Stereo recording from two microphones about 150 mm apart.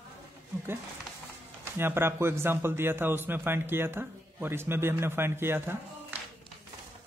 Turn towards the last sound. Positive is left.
turn(degrees=-15)  # may be behind; listen again after turning